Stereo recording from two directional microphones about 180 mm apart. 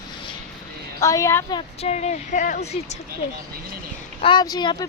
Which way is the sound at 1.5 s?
35° left (ahead or behind).